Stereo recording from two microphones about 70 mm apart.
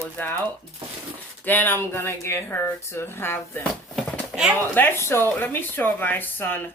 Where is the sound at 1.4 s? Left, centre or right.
Left.